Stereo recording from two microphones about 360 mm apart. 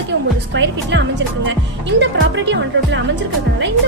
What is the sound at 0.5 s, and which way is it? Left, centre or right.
A woman's voice, right.